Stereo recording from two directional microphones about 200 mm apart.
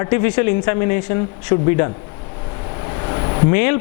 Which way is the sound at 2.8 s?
25° left (ahead or behind).